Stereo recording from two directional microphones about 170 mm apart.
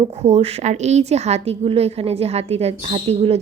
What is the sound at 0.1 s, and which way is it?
A woman's voice, 40° right (ahead or behind).